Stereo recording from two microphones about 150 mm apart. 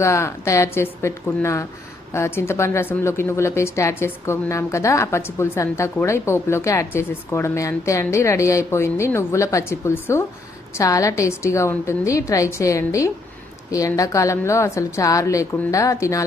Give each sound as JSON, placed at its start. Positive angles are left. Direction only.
{"t": 0.0, "sound": "a woman's voice", "side_deg": 20}